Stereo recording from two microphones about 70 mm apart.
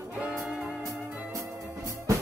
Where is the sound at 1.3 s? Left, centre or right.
Right.